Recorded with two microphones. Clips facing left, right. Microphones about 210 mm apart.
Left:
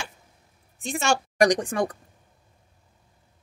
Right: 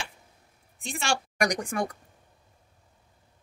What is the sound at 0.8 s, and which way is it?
Speech, 40° left (ahead or behind).